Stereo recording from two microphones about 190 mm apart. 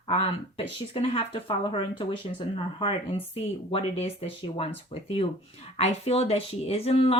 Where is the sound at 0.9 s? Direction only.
30° left (ahead or behind).